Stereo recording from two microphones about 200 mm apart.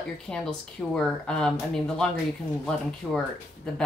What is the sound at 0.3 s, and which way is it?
Speech, 5° left (ahead or behind).